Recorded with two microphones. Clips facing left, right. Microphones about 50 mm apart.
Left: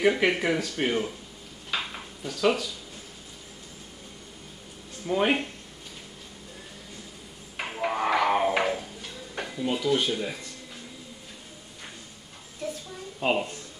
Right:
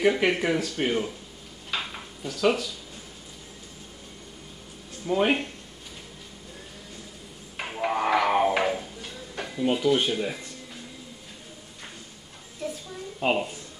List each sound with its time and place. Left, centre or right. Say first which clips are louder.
0.0 s speech: even; centre
1.7 s dishes: even; centre
5.0 s speech: right 1 dB; centre
7.5 s a sound: right 1 dB; centre
9.7 s speech: right 3 dB; centre
12.6 s speech: right 1 dB; centre